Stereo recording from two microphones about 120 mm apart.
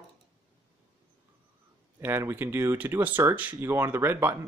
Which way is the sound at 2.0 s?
20° right (ahead or behind).